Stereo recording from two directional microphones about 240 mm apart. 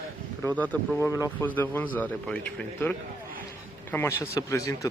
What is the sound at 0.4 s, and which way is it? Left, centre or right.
Speech, centre.